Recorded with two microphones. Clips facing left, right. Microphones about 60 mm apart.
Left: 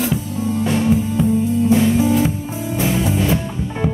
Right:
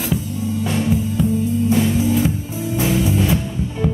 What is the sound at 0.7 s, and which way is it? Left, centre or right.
Music, centre.